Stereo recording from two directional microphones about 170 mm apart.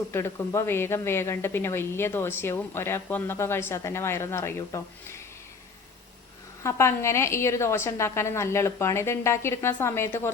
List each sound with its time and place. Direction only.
0.1 s a woman's voice: 15° left (ahead or behind)
6.6 s a woman's voice: 15° left (ahead or behind)